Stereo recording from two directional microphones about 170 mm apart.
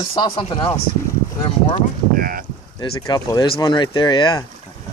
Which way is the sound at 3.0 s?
25° left (ahead or behind).